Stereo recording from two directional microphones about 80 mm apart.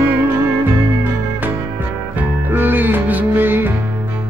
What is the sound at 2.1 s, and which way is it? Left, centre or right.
Music, right.